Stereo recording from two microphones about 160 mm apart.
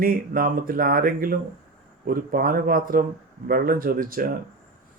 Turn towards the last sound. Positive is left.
turn(degrees=-65)  # may be behind; listen again after turning